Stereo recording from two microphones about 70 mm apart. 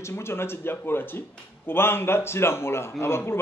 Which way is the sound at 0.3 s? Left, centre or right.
Left.